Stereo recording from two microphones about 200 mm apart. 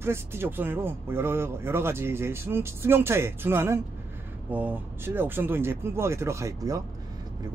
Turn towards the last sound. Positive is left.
turn(degrees=-15)  # may be behind; listen again after turning